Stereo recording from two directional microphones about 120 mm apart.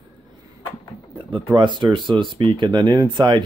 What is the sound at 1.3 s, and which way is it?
Speech, 40° right (ahead or behind).